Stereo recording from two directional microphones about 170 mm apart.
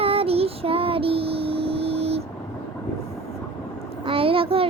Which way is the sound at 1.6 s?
35° right (ahead or behind).